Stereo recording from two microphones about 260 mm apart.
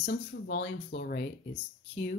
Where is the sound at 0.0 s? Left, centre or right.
Left.